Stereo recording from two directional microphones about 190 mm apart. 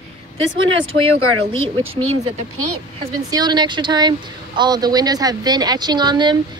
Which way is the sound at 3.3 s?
20° right (ahead or behind).